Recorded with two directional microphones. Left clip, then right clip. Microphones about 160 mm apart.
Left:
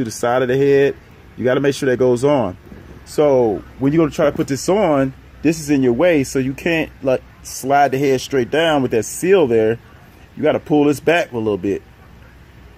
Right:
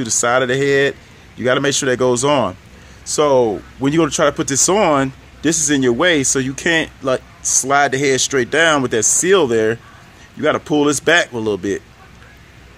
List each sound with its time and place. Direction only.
0.0 s speech: 5° left (ahead or behind)
10.8 s speech: 5° left (ahead or behind)